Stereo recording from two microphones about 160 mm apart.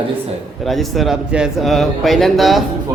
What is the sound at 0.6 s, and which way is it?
A man's voice, centre (ahead or behind).